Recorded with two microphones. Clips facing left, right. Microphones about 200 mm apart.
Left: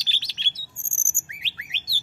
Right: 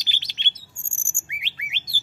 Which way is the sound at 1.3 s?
20° right (ahead or behind).